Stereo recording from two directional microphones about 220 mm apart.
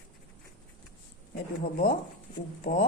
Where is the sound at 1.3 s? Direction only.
40° left (ahead or behind).